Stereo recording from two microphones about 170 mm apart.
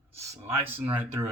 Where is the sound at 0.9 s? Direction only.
10° right (ahead or behind).